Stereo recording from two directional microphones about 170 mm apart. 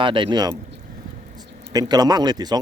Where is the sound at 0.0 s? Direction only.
30° right (ahead or behind).